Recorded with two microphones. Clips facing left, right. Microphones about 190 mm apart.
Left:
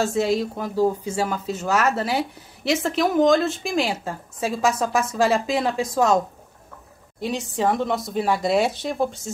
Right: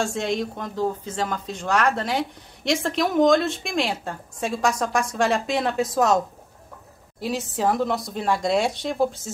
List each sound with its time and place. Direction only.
0.0 s speech: 5° left (ahead or behind)